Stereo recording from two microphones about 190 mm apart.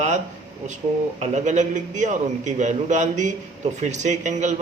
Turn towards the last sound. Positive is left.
turn(degrees=-40)  # may be behind; listen again after turning